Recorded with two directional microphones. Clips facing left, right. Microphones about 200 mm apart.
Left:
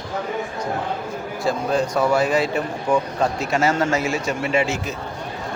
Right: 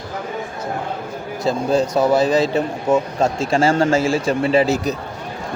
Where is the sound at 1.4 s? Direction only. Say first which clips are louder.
Right 4 dB; 25° right (ahead or behind).